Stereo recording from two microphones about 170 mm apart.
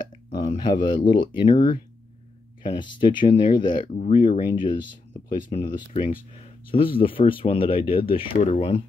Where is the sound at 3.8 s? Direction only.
45° left (ahead or behind).